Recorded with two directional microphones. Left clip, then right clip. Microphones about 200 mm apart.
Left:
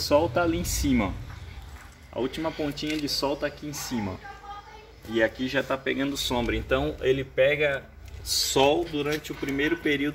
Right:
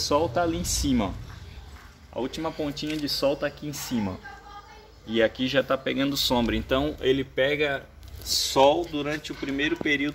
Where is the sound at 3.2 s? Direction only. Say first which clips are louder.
Right 6 dB; 50° right (ahead or behind).